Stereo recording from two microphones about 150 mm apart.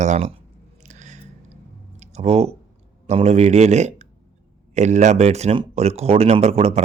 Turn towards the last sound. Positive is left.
turn(degrees=-45)  # may be behind; listen again after turning